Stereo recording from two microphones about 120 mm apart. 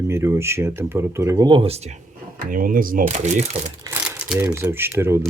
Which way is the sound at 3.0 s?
70° right (ahead or behind).